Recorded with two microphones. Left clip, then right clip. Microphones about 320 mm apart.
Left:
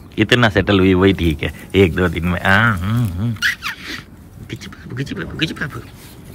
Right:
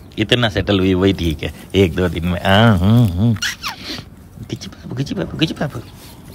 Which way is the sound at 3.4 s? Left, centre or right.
Centre.